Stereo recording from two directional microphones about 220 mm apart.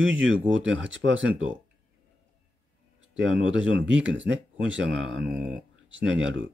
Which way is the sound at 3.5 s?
55° right (ahead or behind).